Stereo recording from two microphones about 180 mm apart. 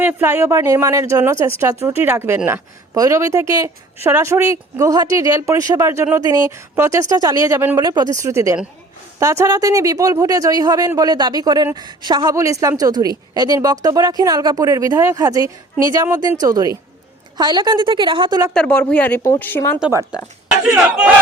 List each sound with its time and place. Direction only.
0.0 s speech: 10° right (ahead or behind)
18.5 s speech: 5° left (ahead or behind)
20.7 s speech: 5° right (ahead or behind)